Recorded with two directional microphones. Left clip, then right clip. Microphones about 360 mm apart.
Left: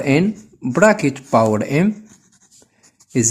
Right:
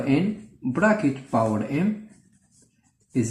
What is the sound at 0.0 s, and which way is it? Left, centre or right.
Speech, left.